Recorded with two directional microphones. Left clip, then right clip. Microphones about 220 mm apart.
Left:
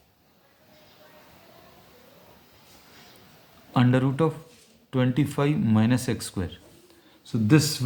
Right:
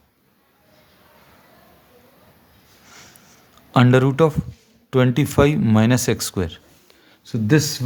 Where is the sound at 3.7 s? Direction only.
45° right (ahead or behind).